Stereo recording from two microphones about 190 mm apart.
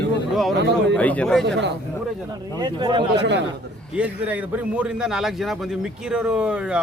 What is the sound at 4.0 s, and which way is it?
A man's voice, 5° right (ahead or behind).